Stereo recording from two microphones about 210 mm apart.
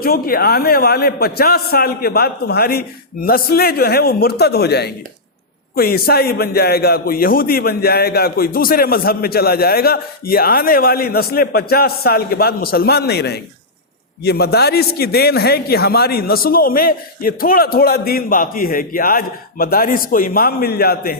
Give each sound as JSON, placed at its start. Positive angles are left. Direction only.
{"t": 0.0, "sound": "a man's voice", "side_deg": 45}